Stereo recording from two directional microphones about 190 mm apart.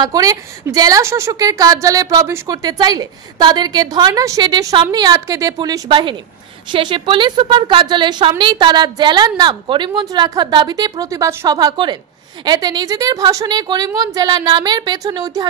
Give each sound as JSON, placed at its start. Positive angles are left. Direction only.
{"t": 0.0, "sound": "a woman's voice", "side_deg": -20}